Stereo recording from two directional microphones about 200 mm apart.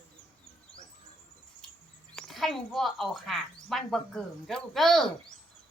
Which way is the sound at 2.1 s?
Centre (ahead or behind).